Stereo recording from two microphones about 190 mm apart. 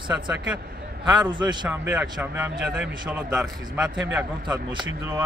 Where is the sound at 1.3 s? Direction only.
25° right (ahead or behind).